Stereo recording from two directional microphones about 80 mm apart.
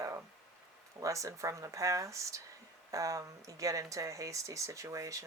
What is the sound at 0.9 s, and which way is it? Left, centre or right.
Speech, right.